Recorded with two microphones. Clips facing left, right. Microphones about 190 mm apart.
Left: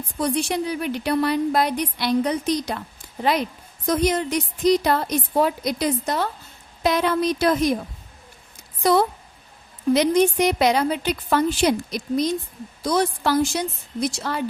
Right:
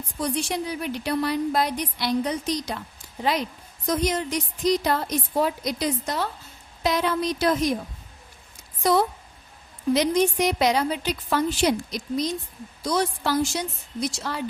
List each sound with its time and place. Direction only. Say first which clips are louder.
0.2 s a woman's voice: left 4 dB; 60° left (ahead or behind)
3.8 s a woman's voice: left 4 dB; 60° left (ahead or behind)
8.8 s a woman's voice: left 3 dB; 65° left (ahead or behind)